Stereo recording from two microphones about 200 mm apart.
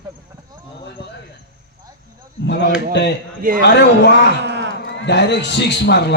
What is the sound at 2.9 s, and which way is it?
Speech, 60° left (ahead or behind).